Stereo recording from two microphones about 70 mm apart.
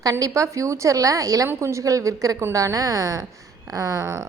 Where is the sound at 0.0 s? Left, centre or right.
Right.